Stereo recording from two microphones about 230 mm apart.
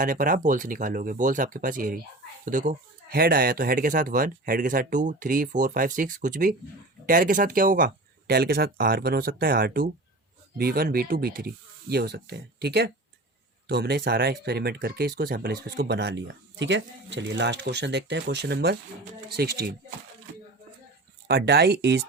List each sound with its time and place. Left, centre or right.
0.0 s speech: right
21.2 s speech: right